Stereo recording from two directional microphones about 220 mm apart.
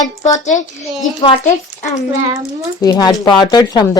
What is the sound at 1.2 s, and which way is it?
Speech, 20° left (ahead or behind).